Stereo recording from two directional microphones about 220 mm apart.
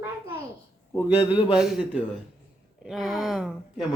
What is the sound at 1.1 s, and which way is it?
Speech, 20° left (ahead or behind).